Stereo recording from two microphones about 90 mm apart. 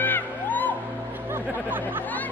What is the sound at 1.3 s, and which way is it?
Chatter, 20° right (ahead or behind).